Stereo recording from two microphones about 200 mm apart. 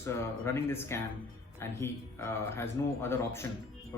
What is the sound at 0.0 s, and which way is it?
Speech, 15° left (ahead or behind).